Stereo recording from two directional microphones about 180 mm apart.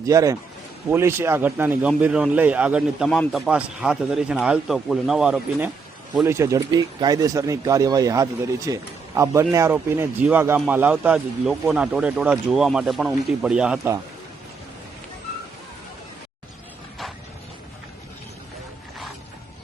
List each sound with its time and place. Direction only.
0.0 s a man's voice: 20° right (ahead or behind)